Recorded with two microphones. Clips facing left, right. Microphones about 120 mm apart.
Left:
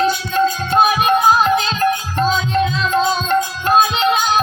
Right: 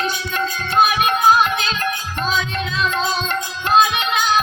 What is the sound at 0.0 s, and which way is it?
Music, 35° left (ahead or behind).